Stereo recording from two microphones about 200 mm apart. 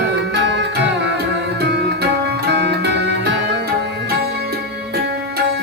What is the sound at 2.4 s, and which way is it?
Music, 60° right (ahead or behind).